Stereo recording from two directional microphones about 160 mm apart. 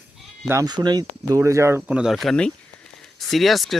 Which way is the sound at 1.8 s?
5° right (ahead or behind).